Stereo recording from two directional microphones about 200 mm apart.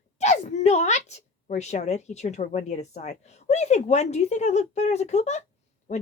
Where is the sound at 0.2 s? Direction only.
35° left (ahead or behind).